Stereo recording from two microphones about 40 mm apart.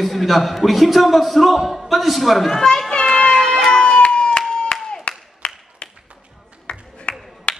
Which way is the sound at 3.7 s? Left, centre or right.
Centre.